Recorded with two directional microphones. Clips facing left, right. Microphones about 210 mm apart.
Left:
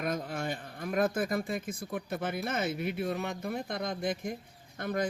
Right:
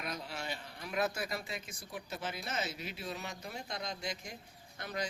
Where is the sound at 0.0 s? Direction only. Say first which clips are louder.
Left 8 dB; 50° left (ahead or behind).